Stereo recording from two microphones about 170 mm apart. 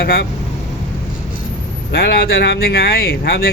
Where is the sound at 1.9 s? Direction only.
65° left (ahead or behind).